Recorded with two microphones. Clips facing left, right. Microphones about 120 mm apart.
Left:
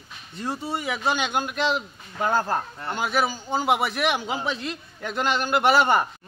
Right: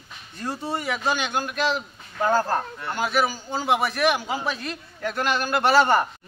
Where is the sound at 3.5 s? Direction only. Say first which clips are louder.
Left 1 dB; 20° left (ahead or behind).